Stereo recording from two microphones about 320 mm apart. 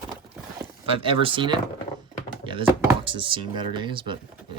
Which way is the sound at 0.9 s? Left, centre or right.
Centre.